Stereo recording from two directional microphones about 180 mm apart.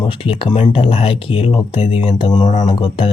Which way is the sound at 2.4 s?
40° left (ahead or behind).